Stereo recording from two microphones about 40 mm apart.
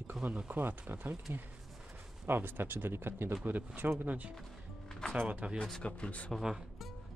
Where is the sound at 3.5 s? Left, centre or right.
Right.